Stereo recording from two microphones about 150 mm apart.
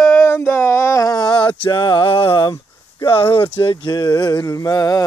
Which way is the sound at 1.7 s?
35° left (ahead or behind).